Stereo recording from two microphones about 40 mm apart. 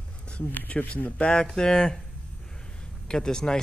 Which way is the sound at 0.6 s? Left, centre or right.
Left.